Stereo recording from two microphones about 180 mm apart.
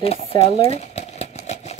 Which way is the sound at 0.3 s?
35° left (ahead or behind).